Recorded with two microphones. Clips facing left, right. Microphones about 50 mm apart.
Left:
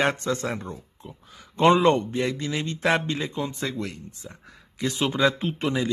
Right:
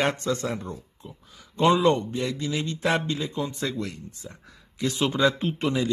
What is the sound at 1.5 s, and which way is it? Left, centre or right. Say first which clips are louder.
Speech: left 2 dB; left.